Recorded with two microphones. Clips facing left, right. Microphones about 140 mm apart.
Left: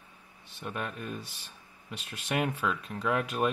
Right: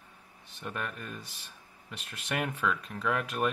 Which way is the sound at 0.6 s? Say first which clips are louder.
Left 2 dB; 15° left (ahead or behind).